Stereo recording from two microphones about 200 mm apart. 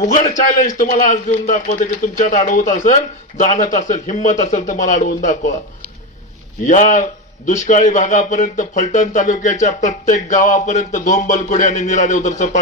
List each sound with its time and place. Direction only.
0.7 s a man's voice: 40° left (ahead or behind)
6.6 s a man's voice: 40° left (ahead or behind)